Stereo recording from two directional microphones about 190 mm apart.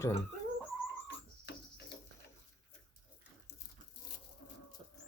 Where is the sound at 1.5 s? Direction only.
65° left (ahead or behind).